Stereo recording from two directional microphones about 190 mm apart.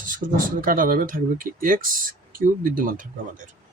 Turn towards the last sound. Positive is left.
turn(degrees=-45)  # may be behind; listen again after turning